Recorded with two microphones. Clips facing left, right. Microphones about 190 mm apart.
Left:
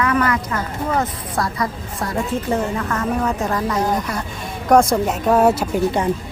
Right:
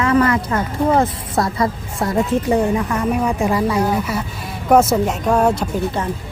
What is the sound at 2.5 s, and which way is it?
A woman's voice, 15° right (ahead or behind).